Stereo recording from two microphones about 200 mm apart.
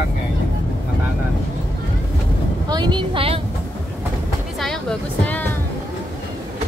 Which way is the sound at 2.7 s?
20° right (ahead or behind).